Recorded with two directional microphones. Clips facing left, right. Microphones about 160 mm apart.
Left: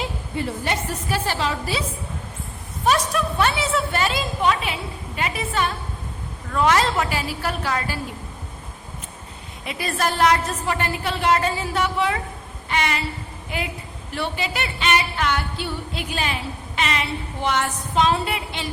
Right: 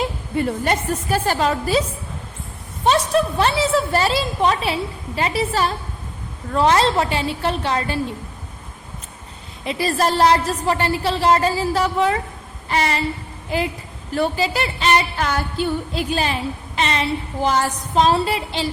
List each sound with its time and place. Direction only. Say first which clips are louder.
0.3 s a woman's voice: right 5 dB; 50° right (ahead or behind)
2.8 s a woman's voice: right 4 dB; 30° right (ahead or behind)
9.6 s a woman's voice: right 5 dB; 30° right (ahead or behind)
12.6 s a sound: right 3 dB; 35° right (ahead or behind)
14.1 s a woman's voice: right 7 dB; 40° right (ahead or behind)